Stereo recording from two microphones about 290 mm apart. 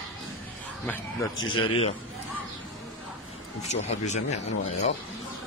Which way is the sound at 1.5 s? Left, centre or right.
Centre.